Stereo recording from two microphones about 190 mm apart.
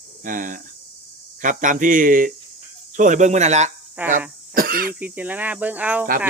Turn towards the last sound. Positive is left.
turn(degrees=-10)  # may be behind; listen again after turning